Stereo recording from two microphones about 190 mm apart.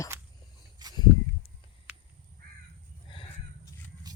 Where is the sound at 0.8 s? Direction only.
20° right (ahead or behind).